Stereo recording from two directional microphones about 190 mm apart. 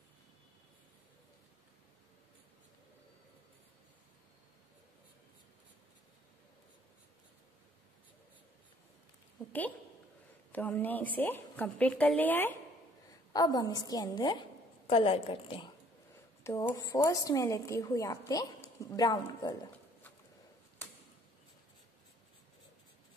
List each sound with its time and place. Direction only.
10.5 s a woman's voice: 10° left (ahead or behind)